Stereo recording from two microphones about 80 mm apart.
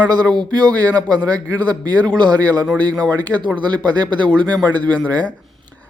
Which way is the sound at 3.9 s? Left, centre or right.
Right.